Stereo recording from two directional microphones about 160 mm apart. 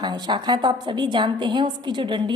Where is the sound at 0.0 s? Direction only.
25° right (ahead or behind).